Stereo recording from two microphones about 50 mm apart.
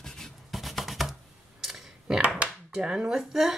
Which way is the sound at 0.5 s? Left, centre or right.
Centre.